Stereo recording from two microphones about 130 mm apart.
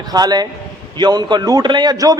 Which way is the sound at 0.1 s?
30° right (ahead or behind).